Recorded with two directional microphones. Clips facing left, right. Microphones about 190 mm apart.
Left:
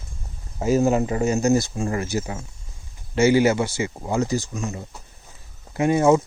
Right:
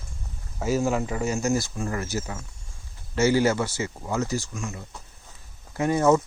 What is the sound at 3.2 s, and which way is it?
Speech, 15° left (ahead or behind).